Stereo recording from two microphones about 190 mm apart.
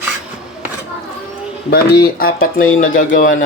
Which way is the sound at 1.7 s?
55° left (ahead or behind).